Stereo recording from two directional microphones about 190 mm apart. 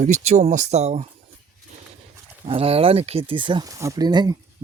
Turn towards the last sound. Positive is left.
turn(degrees=-20)  # may be behind; listen again after turning